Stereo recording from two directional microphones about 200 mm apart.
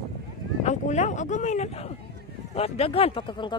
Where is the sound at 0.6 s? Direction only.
35° left (ahead or behind).